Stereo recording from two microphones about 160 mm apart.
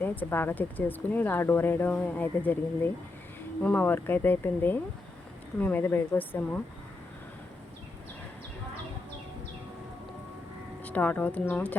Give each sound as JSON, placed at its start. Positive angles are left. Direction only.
{"t": 0.0, "sound": "speech", "side_deg": 10}
{"t": 10.8, "sound": "speech", "side_deg": 10}